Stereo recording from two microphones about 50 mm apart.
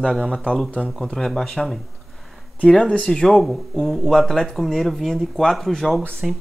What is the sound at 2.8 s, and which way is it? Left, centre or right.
Speech, centre.